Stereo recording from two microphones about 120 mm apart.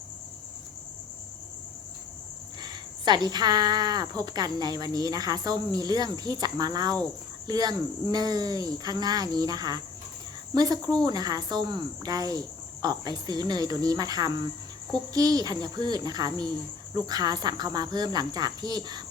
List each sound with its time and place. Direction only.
2.6 s speech: 35° right (ahead or behind)